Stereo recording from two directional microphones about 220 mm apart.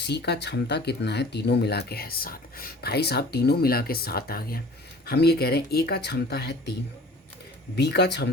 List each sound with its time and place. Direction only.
0.0 s speech: 50° left (ahead or behind)
7.8 s speech: 50° left (ahead or behind)